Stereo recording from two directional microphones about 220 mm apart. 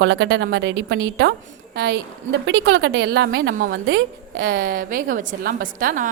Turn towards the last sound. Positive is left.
turn(degrees=-40)  # may be behind; listen again after turning